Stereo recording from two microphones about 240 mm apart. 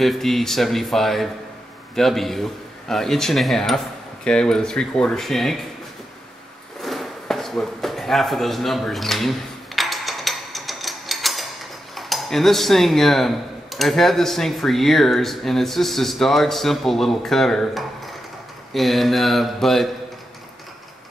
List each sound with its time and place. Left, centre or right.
0.0 s speech: centre
6.8 s a sound: centre
9.8 s music: centre
11.9 s speech: centre